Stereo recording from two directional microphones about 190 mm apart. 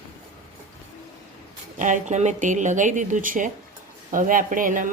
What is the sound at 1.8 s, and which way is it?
A woman's voice, 40° right (ahead or behind).